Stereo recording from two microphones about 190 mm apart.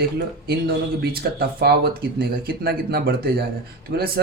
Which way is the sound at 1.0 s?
55° right (ahead or behind).